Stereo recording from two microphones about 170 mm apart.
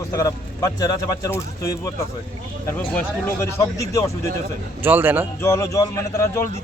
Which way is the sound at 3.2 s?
15° left (ahead or behind).